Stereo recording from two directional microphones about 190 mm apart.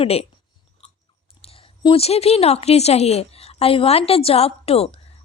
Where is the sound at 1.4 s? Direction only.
30° left (ahead or behind).